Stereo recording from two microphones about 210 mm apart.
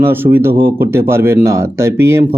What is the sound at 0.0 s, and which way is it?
Speech, 10° right (ahead or behind).